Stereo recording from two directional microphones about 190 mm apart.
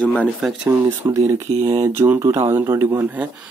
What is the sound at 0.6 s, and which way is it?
Speech, 15° right (ahead or behind).